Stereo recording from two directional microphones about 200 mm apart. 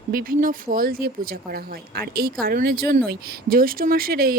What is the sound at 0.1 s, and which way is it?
A woman's voice, 45° right (ahead or behind).